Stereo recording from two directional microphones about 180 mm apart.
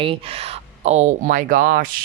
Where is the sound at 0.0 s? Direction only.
30° right (ahead or behind).